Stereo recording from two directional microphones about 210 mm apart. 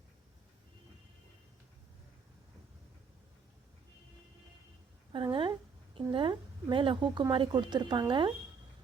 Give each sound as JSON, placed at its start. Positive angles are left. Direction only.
{"t": 5.1, "sound": "a woman's voice", "side_deg": -25}